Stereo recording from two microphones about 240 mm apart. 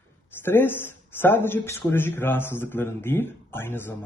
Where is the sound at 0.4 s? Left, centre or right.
Centre.